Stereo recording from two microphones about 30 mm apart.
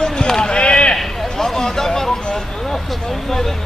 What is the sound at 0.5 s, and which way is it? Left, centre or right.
Chop, left.